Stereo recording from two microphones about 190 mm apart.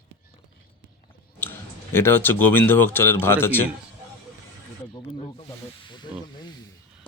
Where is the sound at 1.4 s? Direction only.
10° left (ahead or behind).